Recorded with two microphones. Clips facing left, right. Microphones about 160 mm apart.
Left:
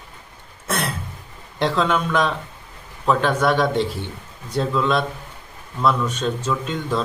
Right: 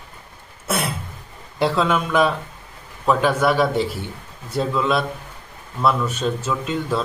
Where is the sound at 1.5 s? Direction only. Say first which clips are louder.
Right 1 dB; 5° right (ahead or behind).